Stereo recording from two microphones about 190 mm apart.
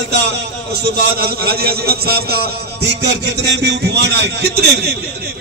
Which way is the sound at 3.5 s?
60° right (ahead or behind).